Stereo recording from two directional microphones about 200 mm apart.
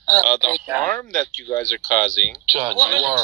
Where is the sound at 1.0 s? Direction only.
40° right (ahead or behind).